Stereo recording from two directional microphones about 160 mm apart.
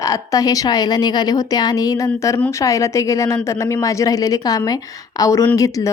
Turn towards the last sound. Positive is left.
turn(degrees=20)  # may be behind; listen again after turning